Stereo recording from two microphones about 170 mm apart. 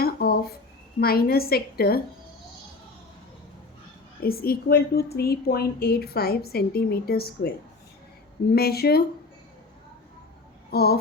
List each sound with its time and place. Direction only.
0.0 s a sound: 65° left (ahead or behind)
0.9 s a woman's voice: 65° left (ahead or behind)
4.2 s a woman's voice: 60° left (ahead or behind)
8.5 s a woman's voice: 65° left (ahead or behind)
10.7 s speech: 65° left (ahead or behind)